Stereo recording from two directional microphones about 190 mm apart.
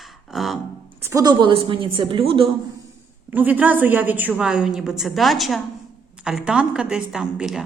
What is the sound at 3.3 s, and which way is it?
Speech, 10° right (ahead or behind).